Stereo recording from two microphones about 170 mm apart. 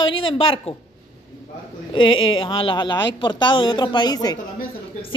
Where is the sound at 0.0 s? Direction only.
30° left (ahead or behind).